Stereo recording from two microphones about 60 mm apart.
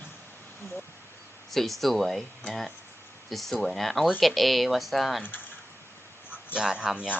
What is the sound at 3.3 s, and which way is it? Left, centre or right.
Speech, centre.